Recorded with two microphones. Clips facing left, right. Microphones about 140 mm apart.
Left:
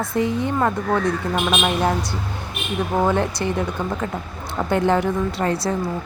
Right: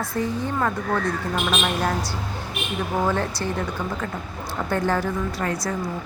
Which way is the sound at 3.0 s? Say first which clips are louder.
Left 4 dB; 20° left (ahead or behind).